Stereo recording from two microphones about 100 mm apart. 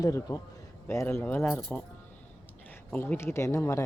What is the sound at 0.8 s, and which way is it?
Speech, 25° left (ahead or behind).